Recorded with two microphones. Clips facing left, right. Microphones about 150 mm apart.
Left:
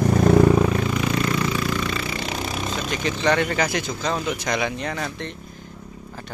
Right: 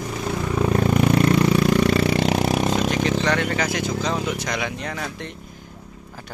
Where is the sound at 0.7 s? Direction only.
50° right (ahead or behind).